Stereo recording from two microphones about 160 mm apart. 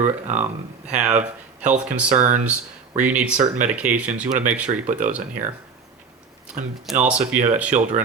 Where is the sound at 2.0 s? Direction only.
50° right (ahead or behind).